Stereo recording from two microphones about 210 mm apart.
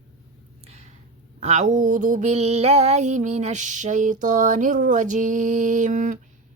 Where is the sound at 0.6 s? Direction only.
30° right (ahead or behind).